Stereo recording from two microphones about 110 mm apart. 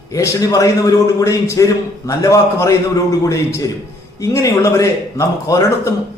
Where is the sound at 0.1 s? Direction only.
30° left (ahead or behind).